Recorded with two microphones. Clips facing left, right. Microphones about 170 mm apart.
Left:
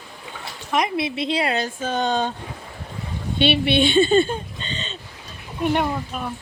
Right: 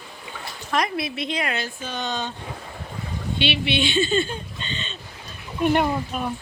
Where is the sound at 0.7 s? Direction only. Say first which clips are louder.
Left 2 dB; 20° left (ahead or behind); by 2.3 s 45° left (ahead or behind).